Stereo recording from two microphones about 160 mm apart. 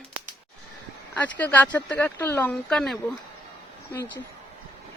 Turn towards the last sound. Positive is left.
turn(degrees=15)  # may be behind; listen again after turning